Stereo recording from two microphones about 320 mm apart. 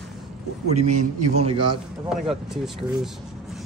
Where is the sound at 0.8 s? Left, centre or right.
Right.